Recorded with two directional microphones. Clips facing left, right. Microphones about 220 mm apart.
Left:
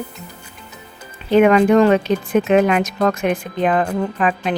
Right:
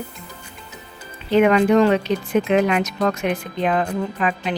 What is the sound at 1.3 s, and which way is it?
Speech, 50° left (ahead or behind).